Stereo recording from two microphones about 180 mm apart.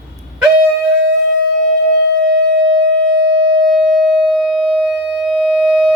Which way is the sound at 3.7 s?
Centre (ahead or behind).